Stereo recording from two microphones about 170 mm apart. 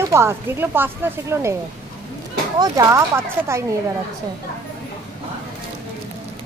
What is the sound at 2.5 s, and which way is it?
Speech, 20° right (ahead or behind).